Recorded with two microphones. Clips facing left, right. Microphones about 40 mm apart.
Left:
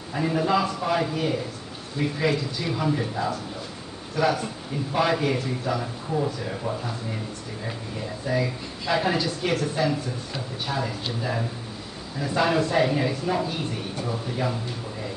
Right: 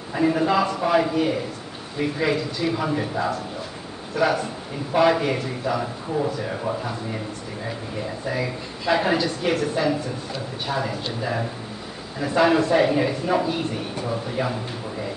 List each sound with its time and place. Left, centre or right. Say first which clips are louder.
0.1 s a woman's voice: right 3 dB; centre
8.3 s a woman's voice: left 3 dB; centre